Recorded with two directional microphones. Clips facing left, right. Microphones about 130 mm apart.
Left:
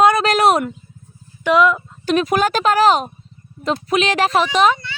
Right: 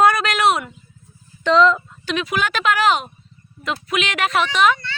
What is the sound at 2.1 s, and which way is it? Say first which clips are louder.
Speech: left 6 dB; 45° left (ahead or behind).